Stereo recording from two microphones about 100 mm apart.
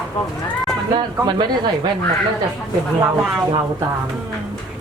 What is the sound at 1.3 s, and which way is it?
Speech, 45° right (ahead or behind).